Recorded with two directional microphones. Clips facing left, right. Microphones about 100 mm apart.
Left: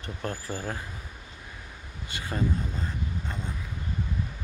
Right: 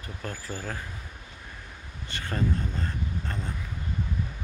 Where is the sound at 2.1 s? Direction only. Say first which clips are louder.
Even; 10° left (ahead or behind).